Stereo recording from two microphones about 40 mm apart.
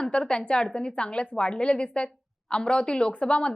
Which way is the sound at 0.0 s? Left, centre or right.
Left.